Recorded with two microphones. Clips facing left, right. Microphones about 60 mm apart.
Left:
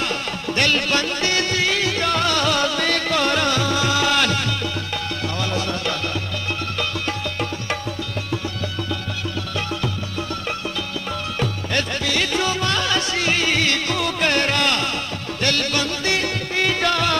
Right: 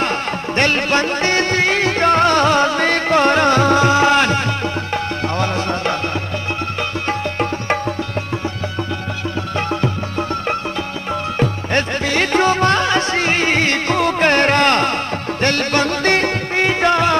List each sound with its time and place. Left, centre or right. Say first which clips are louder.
0.0 s music: right 5 dB; right
7.1 s music: right 6 dB; right
11.3 s music: right 5 dB; right
16.6 s music: right 6 dB; right